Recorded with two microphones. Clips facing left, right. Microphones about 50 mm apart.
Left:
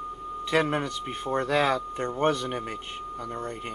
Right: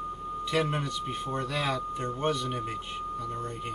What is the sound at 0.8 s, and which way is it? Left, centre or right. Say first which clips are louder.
Speech: left 1 dB; left.